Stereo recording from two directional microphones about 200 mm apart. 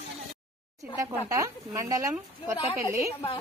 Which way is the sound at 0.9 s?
15° right (ahead or behind).